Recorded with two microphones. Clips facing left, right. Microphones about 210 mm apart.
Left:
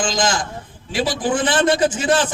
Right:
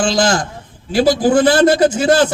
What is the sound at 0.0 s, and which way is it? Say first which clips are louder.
A man's voice: right 6 dB; 40° right (ahead or behind).